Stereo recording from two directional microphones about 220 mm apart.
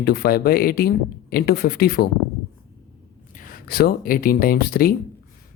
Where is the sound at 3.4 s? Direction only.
40° left (ahead or behind).